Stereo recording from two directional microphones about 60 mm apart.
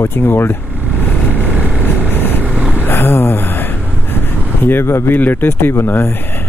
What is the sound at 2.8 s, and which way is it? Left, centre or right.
Speech, left.